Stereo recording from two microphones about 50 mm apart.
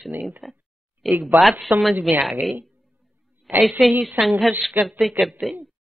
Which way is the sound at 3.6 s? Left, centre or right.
Centre.